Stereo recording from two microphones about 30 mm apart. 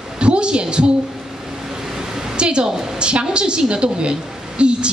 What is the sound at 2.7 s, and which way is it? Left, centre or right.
Speech, centre.